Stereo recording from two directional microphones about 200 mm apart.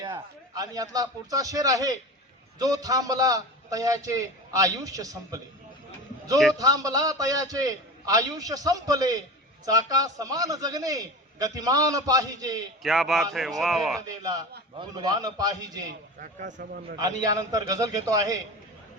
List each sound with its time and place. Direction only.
0.1 s a man's voice: 20° right (ahead or behind)
6.5 s a man's voice: 20° right (ahead or behind)
12.8 s speech: centre (ahead or behind)
14.2 s a man's voice: 20° right (ahead or behind)
16.2 s speech: 40° right (ahead or behind)
17.0 s a man's voice: 20° right (ahead or behind)